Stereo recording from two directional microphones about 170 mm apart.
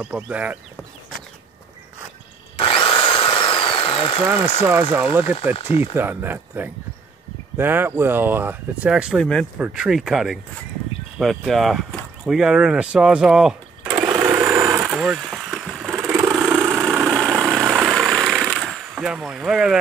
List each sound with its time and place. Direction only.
0.0 s speech: 10° right (ahead or behind)
2.5 s drill: 30° left (ahead or behind)
3.0 s a sound: 30° left (ahead or behind)
4.2 s speech: 10° right (ahead or behind)
14.4 s vehicle: 15° right (ahead or behind)
16.0 s vehicle: 20° right (ahead or behind)
16.3 s vehicle: 5° right (ahead or behind)